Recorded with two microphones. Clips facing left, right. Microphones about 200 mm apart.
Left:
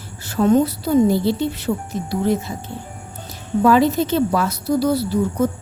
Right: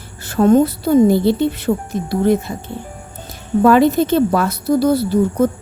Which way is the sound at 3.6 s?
55° right (ahead or behind).